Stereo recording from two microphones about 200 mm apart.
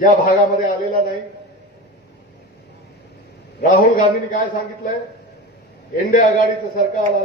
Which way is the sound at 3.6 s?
40° left (ahead or behind).